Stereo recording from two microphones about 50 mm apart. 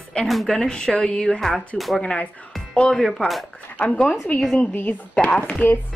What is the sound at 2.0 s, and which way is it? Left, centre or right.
Speech, left.